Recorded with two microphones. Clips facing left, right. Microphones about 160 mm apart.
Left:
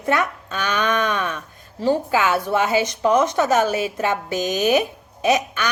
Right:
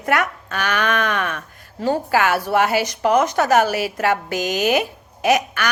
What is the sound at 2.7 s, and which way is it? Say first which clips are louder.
Speech: even; 25° left (ahead or behind).